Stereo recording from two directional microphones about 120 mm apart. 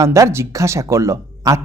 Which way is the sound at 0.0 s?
25° right (ahead or behind).